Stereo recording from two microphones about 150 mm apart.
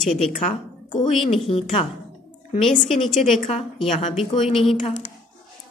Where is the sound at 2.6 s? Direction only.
Centre (ahead or behind).